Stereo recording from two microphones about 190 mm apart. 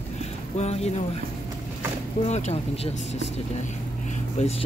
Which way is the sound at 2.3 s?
35° left (ahead or behind).